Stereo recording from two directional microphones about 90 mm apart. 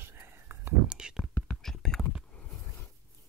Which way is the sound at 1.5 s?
5° left (ahead or behind).